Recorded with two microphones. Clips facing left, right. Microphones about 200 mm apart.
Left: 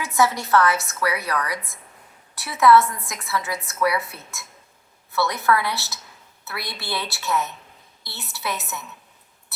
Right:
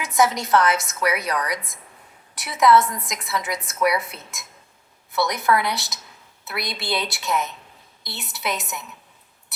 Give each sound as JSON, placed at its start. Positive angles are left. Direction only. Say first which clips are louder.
{"t": 0.0, "sound": "a woman's voice", "louder": "right 1 dB", "side_deg": -20}